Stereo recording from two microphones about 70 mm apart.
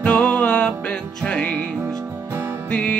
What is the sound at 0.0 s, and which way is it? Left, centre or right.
Music, centre.